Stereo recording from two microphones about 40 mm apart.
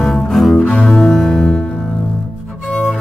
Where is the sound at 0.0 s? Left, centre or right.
Centre.